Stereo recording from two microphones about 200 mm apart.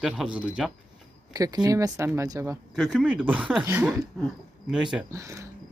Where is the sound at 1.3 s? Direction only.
20° right (ahead or behind).